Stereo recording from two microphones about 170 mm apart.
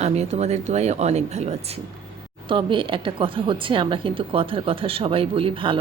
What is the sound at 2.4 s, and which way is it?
A woman's voice, 30° right (ahead or behind).